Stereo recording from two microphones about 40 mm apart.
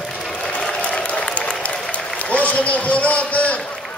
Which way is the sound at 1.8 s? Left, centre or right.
Left.